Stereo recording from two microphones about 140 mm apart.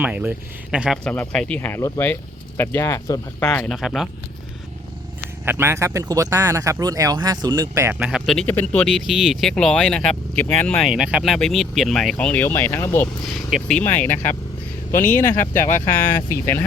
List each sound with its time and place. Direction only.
0.0 s speech: 10° right (ahead or behind)
1.0 s speech: 10° left (ahead or behind)
3.5 s speech: 5° left (ahead or behind)
5.5 s speech: 15° right (ahead or behind)
7.9 s speech: 5° right (ahead or behind)
8.4 s speech: 10° left (ahead or behind)
10.8 s speech: 5° right (ahead or behind); by 13.1 s 15° left (ahead or behind)
13.2 s speech: centre (ahead or behind)
15.5 s speech: 65° left (ahead or behind)
16.0 s speech: 15° left (ahead or behind)